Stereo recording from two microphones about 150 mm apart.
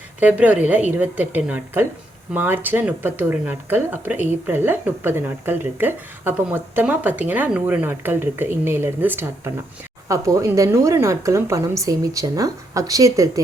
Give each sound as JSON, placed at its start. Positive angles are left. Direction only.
{"t": 0.2, "sound": "a woman's voice", "side_deg": -10}